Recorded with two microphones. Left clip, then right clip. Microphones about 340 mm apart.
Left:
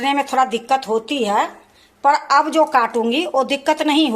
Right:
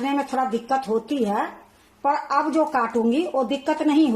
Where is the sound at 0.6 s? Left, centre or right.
Left.